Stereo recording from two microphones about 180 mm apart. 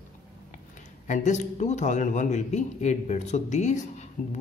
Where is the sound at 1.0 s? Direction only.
40° left (ahead or behind).